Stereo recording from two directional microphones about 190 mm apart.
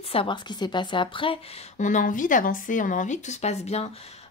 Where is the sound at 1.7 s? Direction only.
40° left (ahead or behind).